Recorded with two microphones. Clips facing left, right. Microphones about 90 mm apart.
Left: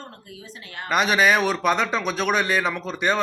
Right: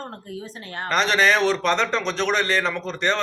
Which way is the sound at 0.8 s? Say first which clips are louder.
Even; 10° left (ahead or behind).